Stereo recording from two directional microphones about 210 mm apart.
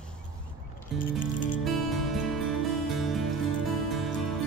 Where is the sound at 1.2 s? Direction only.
40° left (ahead or behind).